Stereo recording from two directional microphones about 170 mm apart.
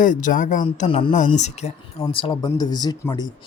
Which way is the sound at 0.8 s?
35° left (ahead or behind).